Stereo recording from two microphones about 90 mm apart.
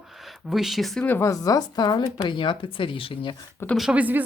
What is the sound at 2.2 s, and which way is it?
Speech, 65° left (ahead or behind).